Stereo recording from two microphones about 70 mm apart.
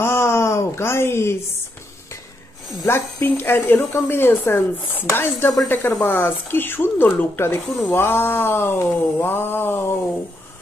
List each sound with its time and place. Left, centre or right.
0.0 s a sound: left
2.9 s speech: left
7.6 s speech: centre
7.9 s speech: left